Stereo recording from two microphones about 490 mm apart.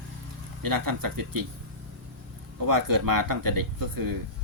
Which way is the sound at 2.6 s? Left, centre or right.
Right.